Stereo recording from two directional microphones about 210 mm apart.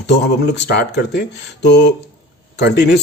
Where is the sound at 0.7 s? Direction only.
55° left (ahead or behind).